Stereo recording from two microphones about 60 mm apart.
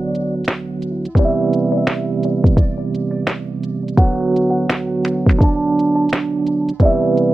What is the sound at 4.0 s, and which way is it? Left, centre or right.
Music, centre.